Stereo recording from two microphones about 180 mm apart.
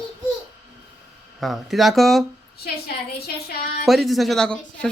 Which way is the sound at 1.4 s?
Centre (ahead or behind).